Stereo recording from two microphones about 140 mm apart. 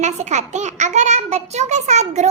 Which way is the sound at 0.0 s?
55° right (ahead or behind).